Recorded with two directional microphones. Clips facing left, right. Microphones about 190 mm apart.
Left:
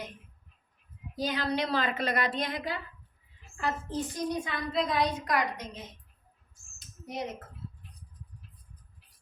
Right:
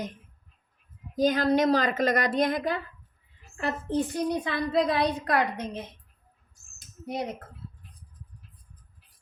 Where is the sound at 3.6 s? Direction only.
65° right (ahead or behind).